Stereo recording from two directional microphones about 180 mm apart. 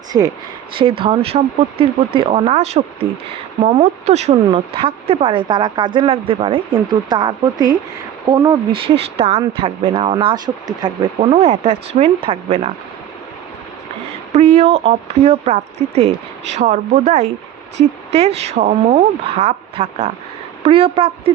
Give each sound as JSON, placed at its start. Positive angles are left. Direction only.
{"t": 0.1, "sound": "speech", "side_deg": -15}
{"t": 0.8, "sound": "speech", "side_deg": -30}
{"t": 14.3, "sound": "speech", "side_deg": -35}